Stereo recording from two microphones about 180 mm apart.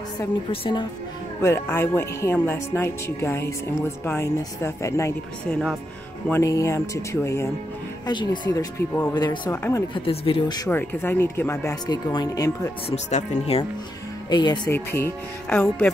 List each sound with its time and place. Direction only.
0.5 s speech: 25° left (ahead or behind)
1.4 s speech: 15° left (ahead or behind)
6.2 s speech: 15° left (ahead or behind)
9.9 s speech: 30° left (ahead or behind)
10.7 s speech: 10° left (ahead or behind)
12.9 s speech: 35° left (ahead or behind)
14.3 s speech: 25° left (ahead or behind)
14.7 s speech: 15° left (ahead or behind)